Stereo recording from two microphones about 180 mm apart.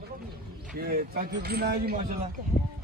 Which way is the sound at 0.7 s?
55° right (ahead or behind).